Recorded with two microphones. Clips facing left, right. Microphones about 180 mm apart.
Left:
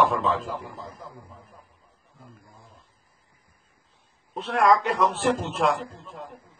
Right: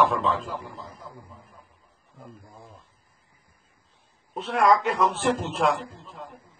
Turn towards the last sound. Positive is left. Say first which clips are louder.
# even
turn(degrees=0)  # may be behind; listen again after turning